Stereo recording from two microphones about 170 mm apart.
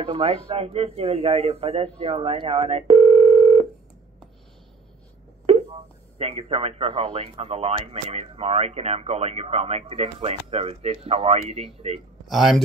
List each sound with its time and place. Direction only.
0.0 s speech: 35° right (ahead or behind)
5.5 s speech: 35° right (ahead or behind)
12.3 s speech: centre (ahead or behind)